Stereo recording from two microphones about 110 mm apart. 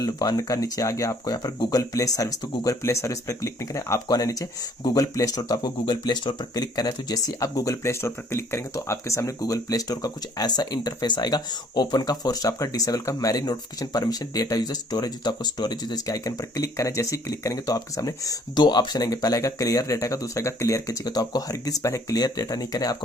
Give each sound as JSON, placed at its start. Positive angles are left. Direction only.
{"t": 0.0, "sound": "speech", "side_deg": 35}